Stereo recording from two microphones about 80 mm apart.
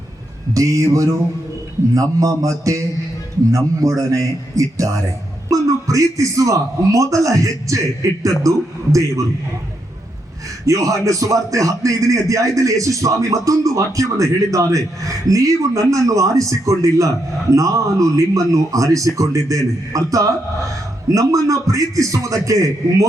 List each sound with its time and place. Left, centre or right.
0.5 s speech: right
10.7 s speech: right